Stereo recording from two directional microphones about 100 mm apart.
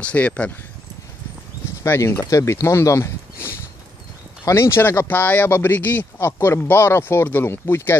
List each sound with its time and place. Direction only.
0.0 s speech: 15° left (ahead or behind)
1.8 s speech: 25° left (ahead or behind)